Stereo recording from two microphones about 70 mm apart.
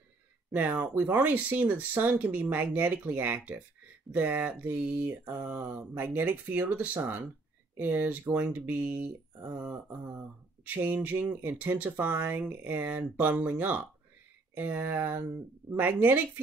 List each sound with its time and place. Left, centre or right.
0.5 s mantra: right